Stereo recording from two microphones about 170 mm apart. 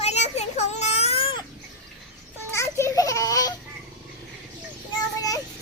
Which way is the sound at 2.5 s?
15° left (ahead or behind).